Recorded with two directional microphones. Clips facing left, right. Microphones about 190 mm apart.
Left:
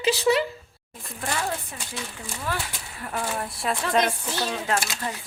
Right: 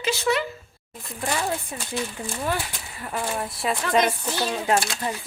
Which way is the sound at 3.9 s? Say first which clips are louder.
Right 3 dB; 15° right (ahead or behind).